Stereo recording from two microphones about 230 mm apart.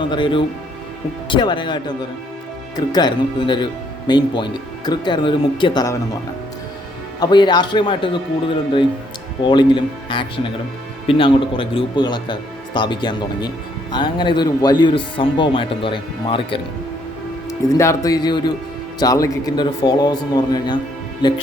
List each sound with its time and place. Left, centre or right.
0.0 s speech: left
7.2 s speech: centre